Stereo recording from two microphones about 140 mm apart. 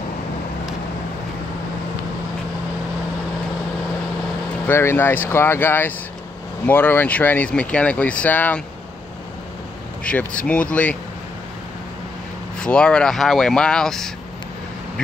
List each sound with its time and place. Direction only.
4.6 s speech: 15° left (ahead or behind)
10.0 s speech: 10° left (ahead or behind)
12.5 s speech: 5° left (ahead or behind)